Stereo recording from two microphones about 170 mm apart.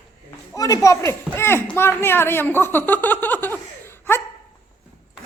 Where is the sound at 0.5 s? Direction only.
20° left (ahead or behind).